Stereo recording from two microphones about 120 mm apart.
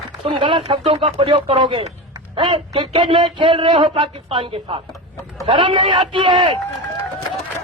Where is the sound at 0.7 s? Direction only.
45° right (ahead or behind).